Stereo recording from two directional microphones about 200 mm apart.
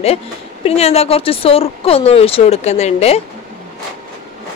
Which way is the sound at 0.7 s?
30° left (ahead or behind).